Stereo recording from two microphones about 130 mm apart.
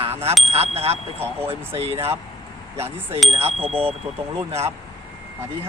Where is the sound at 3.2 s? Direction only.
50° right (ahead or behind).